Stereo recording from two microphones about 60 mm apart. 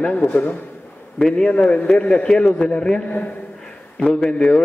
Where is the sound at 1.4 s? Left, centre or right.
Left.